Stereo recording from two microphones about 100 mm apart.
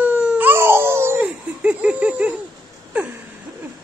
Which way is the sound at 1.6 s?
15° right (ahead or behind).